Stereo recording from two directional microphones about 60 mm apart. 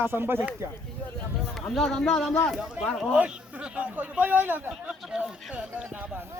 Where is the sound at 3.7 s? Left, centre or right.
Right.